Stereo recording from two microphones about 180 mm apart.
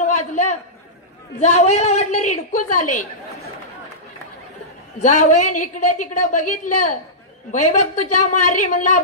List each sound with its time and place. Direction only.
0.0 s a sound: 40° left (ahead or behind)
1.4 s a woman's voice: 40° left (ahead or behind)
5.0 s speech: 45° left (ahead or behind)